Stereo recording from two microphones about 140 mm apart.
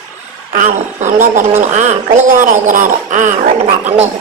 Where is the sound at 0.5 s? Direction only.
65° right (ahead or behind).